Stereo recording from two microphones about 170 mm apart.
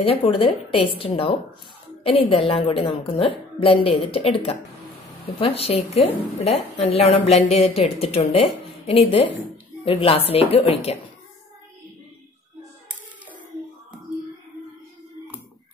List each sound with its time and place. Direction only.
0.0 s a woman's voice: 35° left (ahead or behind)